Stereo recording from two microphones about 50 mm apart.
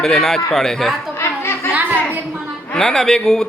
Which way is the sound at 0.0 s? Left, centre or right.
Centre.